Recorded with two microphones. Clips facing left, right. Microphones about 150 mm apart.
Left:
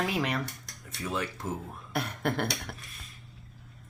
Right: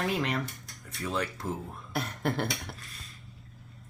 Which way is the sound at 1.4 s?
20° left (ahead or behind).